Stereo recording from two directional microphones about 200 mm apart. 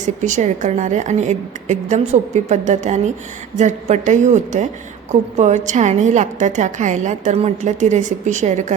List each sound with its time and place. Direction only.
0.0 s a woman's voice: 40° right (ahead or behind)